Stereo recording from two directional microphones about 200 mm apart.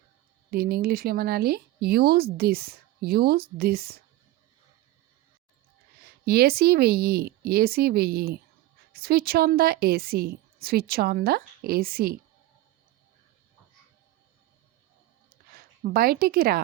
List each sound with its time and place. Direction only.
0.5 s speech: 50° right (ahead or behind)
6.1 s speech: 50° right (ahead or behind)
15.5 s a woman's voice: 50° right (ahead or behind)